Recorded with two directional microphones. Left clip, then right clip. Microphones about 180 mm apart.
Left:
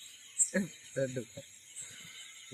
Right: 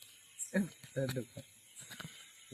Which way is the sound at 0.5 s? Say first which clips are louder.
Even; 60° right (ahead or behind).